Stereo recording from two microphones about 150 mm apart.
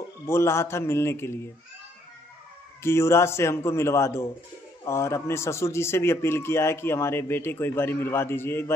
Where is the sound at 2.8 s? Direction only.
15° left (ahead or behind).